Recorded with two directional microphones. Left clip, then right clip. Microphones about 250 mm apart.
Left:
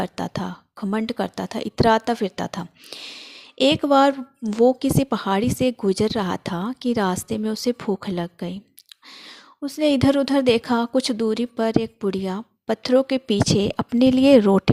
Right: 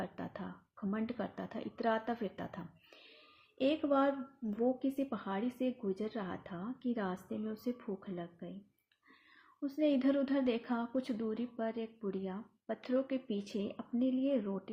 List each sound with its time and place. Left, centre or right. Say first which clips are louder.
0.0 s a woman's voice: left 16 dB; left
9.6 s speech: left 13 dB; left